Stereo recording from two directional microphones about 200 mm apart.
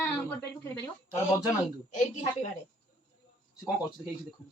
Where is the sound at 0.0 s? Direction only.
10° left (ahead or behind).